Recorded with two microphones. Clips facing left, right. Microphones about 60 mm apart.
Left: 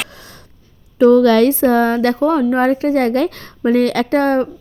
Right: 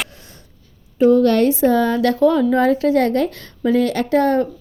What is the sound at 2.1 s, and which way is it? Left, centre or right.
Speech, left.